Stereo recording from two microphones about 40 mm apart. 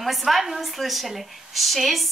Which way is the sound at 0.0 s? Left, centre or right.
Centre.